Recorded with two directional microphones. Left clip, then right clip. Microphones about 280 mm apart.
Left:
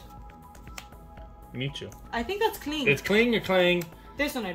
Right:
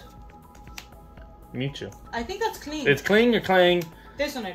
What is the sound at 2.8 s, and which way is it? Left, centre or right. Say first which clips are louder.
Speech: right 3 dB; centre.